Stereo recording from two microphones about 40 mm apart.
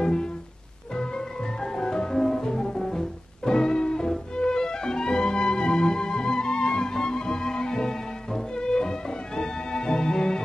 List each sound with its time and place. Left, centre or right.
0.0 s music: centre
2.1 s music: centre
2.4 s music: centre